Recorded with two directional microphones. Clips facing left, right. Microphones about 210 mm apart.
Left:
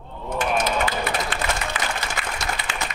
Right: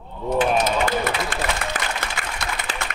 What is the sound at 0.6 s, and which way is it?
Run, 45° right (ahead or behind).